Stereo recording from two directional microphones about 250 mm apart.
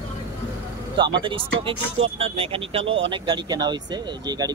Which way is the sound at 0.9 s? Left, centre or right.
Centre.